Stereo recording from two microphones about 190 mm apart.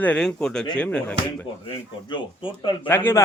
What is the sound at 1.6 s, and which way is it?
Speech, 25° left (ahead or behind).